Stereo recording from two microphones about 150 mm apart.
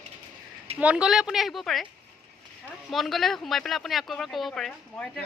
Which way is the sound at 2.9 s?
Centre (ahead or behind).